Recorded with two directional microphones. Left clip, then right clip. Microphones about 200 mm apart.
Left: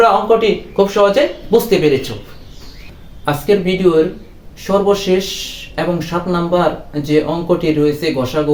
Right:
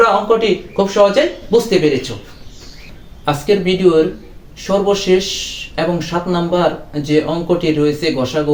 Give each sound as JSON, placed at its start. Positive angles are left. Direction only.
{"t": 0.0, "sound": "speech", "side_deg": 15}
{"t": 3.2, "sound": "speech", "side_deg": 0}